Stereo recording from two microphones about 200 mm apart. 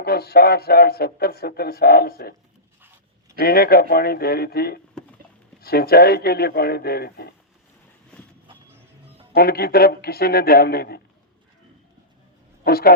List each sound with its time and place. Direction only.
0.0 s speech: 50° left (ahead or behind)
3.3 s speech: 50° left (ahead or behind)
9.3 s speech: 50° left (ahead or behind)
12.6 s speech: 50° left (ahead or behind)